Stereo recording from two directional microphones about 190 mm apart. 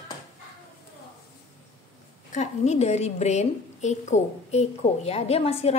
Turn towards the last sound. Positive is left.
turn(degrees=30)  # may be behind; listen again after turning